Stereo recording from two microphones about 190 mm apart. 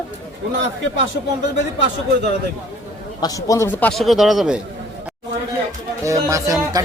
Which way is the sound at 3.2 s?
20° left (ahead or behind).